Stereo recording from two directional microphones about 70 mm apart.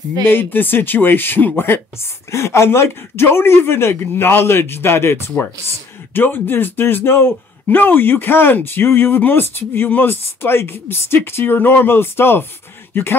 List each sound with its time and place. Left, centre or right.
0.2 s speech: left